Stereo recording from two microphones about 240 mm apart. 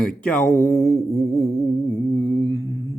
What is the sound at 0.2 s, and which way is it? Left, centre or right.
Mantra, centre.